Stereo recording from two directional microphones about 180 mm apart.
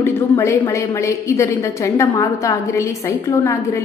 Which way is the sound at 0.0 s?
15° left (ahead or behind).